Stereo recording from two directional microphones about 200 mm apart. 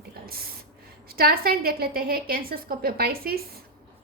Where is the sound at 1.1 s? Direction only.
50° right (ahead or behind).